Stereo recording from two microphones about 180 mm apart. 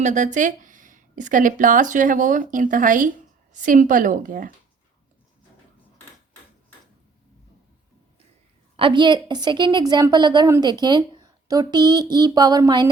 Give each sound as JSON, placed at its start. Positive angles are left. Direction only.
{"t": 0.0, "sound": "speech", "side_deg": -40}
{"t": 8.7, "sound": "a woman's voice", "side_deg": -25}